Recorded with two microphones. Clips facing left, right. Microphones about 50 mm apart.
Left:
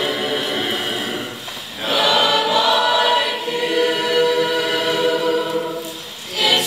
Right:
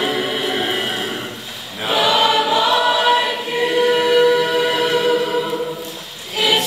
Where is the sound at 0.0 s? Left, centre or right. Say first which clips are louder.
Right 1 dB; centre.